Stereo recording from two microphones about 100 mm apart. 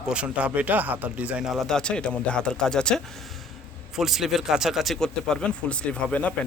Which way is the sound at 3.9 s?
5° right (ahead or behind).